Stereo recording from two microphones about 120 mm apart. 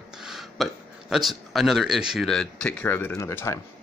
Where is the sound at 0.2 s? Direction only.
Centre (ahead or behind).